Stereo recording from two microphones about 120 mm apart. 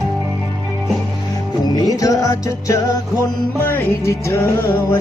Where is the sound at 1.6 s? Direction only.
30° left (ahead or behind).